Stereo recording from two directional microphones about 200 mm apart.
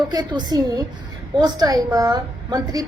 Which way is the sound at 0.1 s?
20° right (ahead or behind).